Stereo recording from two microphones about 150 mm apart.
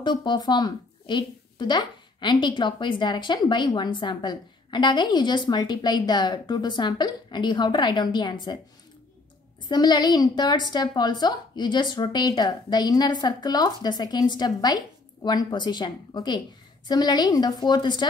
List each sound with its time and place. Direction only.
0.0 s speech: 30° left (ahead or behind)
9.7 s a woman's voice: 30° left (ahead or behind)